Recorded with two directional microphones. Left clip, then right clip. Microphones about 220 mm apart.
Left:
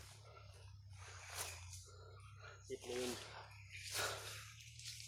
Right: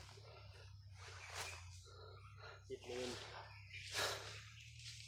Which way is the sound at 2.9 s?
35° left (ahead or behind).